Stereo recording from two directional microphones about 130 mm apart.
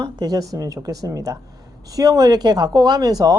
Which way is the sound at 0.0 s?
30° right (ahead or behind).